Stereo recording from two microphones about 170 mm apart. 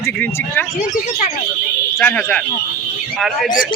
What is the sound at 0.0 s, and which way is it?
Speech, 10° left (ahead or behind).